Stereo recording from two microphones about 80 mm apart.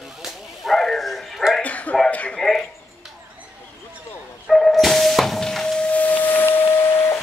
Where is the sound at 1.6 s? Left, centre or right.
Centre.